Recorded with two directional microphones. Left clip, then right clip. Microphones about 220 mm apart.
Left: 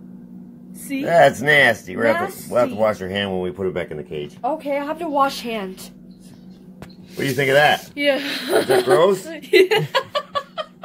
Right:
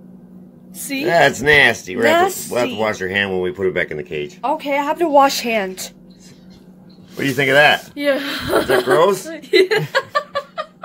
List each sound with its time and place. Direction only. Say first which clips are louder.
1.0 s speech: even; 15° right (ahead or behind)
4.4 s a woman's voice: right 4 dB; 35° right (ahead or behind)
7.2 s speech: right 3 dB; 10° right (ahead or behind)